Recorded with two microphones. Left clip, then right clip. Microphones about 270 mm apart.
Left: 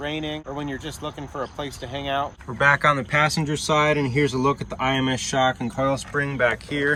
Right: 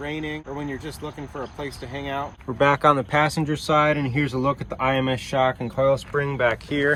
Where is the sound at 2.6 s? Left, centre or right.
Centre.